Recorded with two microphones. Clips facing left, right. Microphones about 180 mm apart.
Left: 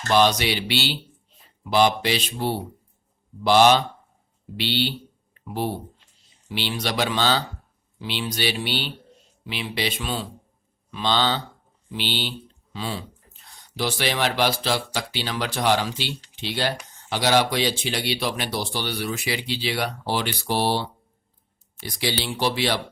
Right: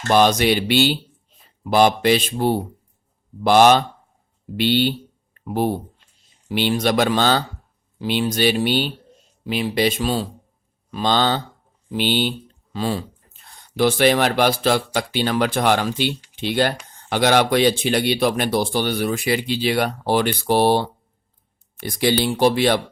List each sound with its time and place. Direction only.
0.1 s speech: 50° right (ahead or behind)